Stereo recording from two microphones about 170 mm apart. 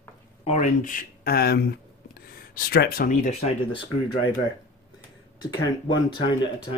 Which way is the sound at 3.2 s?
40° left (ahead or behind).